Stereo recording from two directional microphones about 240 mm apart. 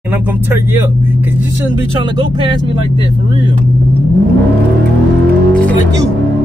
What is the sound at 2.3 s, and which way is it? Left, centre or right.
Speech, centre.